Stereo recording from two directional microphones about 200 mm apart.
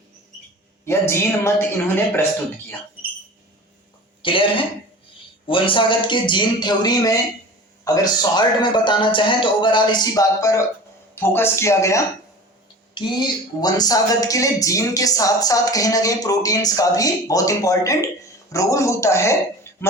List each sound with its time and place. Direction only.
0.9 s speech: 15° left (ahead or behind)
4.2 s a man's voice: 25° left (ahead or behind)
12.9 s a sound: 20° left (ahead or behind)
13.6 s speech: 20° left (ahead or behind)